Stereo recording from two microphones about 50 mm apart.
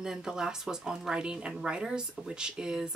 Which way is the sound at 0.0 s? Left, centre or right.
Centre.